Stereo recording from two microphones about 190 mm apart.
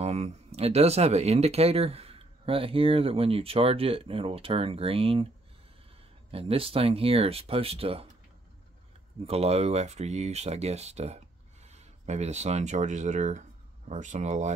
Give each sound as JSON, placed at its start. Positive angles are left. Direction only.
{"t": 0.0, "sound": "speech", "side_deg": -35}
{"t": 6.3, "sound": "speech", "side_deg": -30}
{"t": 9.2, "sound": "speech", "side_deg": -30}